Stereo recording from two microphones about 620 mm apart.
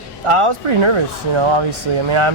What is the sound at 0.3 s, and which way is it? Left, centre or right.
Speech, right.